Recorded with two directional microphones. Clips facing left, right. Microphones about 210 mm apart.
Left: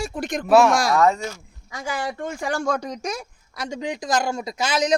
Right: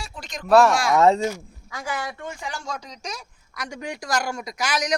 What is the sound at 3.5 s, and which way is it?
Speech, 25° left (ahead or behind).